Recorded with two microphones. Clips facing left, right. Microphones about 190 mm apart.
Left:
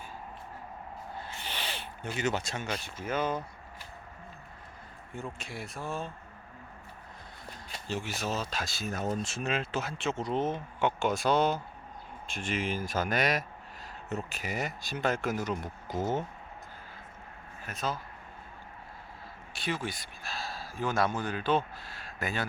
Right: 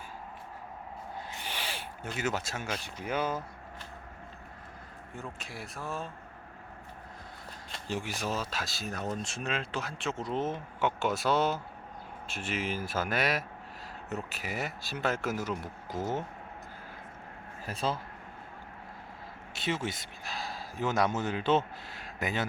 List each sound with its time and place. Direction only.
1.3 s a sound: 10° right (ahead or behind)
2.1 s speech: 5° right (ahead or behind)
5.1 s speech: centre (ahead or behind)
7.9 s speech: 15° right (ahead or behind)
17.7 s speech: 30° right (ahead or behind)
19.5 s speech: 25° right (ahead or behind)